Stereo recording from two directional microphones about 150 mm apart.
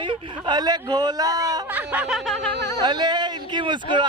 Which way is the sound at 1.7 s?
10° right (ahead or behind).